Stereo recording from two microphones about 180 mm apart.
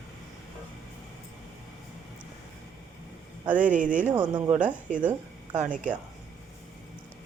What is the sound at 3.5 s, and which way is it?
Speech, 45° right (ahead or behind).